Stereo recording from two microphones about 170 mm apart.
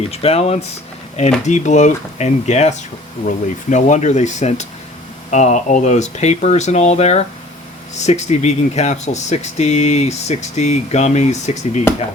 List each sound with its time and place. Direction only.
0.1 s speech: 35° left (ahead or behind)